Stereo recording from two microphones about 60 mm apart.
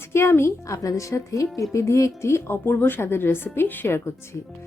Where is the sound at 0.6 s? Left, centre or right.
Left.